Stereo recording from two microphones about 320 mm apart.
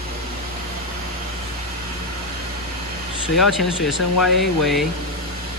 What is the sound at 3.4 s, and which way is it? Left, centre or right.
Speech, centre.